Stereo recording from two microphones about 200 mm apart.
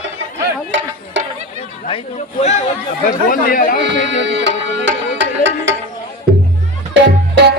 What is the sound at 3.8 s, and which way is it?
Music, 60° right (ahead or behind).